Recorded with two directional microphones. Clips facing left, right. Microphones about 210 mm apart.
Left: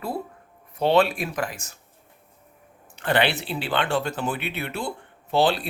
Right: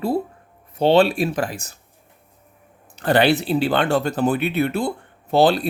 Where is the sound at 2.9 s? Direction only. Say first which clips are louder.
Right 6 dB; 40° right (ahead or behind).